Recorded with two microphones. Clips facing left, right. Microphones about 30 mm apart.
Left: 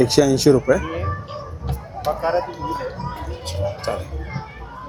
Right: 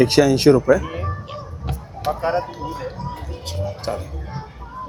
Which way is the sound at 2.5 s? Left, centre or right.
Centre.